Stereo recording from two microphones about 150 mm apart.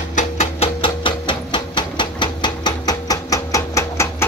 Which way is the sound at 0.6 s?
35° left (ahead or behind).